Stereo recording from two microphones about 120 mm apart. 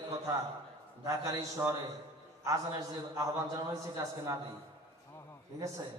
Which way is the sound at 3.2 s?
30° right (ahead or behind).